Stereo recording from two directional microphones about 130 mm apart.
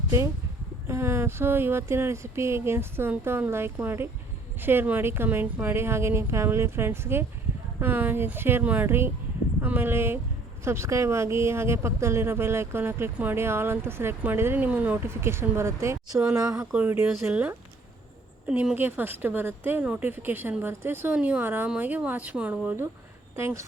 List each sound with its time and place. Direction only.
0.9 s speech: 20° right (ahead or behind)